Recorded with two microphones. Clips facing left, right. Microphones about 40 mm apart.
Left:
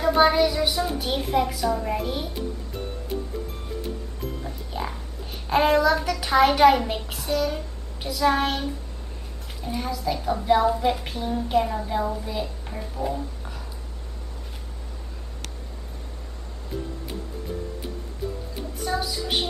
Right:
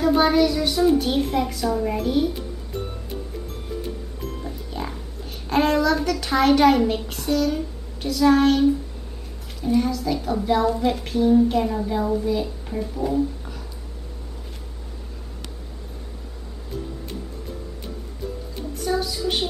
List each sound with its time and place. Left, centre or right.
0.0 s a child's voice: centre
4.4 s music: centre
5.5 s a child's voice: centre
18.8 s speech: centre